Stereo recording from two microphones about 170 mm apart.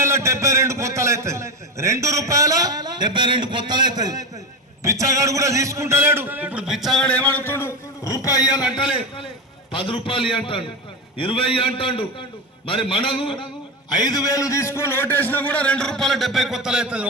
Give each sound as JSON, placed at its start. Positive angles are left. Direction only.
{"t": 0.0, "sound": "a man's voice", "side_deg": -15}